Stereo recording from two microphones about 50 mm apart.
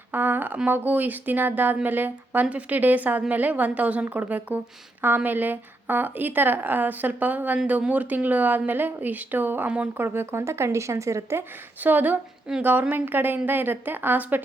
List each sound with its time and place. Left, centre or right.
0.1 s speech: right
9.6 s speech: right
10.0 s speech: right
10.4 s speech: right
11.8 s speech: right
12.5 s a woman's voice: centre
12.9 s speech: right